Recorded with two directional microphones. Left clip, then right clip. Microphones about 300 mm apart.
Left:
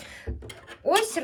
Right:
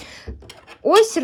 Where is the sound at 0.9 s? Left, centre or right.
Centre.